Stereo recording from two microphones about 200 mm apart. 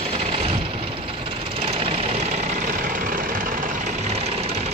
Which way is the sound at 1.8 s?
30° right (ahead or behind).